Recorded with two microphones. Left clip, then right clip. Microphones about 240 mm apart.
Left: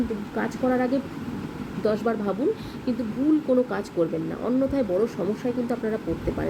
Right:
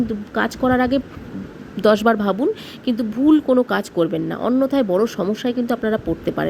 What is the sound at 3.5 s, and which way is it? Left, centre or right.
Speech, right.